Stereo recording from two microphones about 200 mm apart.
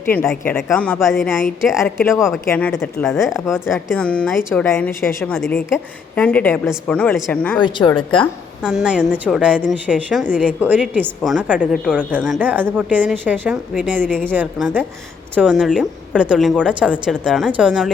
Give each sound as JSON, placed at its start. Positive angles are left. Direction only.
{"t": 0.1, "sound": "a woman's voice", "side_deg": 10}
{"t": 2.0, "sound": "a woman's voice", "side_deg": 15}
{"t": 4.7, "sound": "a woman's voice", "side_deg": 10}
{"t": 7.6, "sound": "speech", "side_deg": 25}
{"t": 8.6, "sound": "a woman's voice", "side_deg": -5}